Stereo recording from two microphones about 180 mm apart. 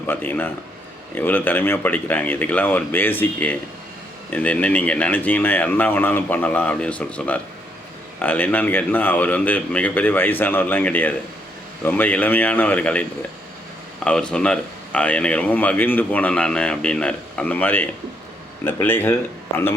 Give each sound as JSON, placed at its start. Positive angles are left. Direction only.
{"t": 0.1, "sound": "speech", "side_deg": 10}